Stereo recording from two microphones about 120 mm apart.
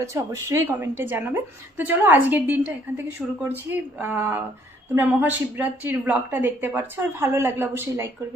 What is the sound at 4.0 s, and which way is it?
A woman's voice, 15° right (ahead or behind).